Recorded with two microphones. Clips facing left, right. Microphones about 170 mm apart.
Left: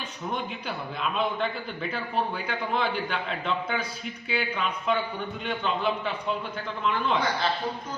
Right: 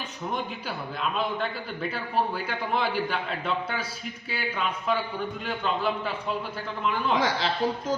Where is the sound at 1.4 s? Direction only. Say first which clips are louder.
Left 1 dB; 5° right (ahead or behind).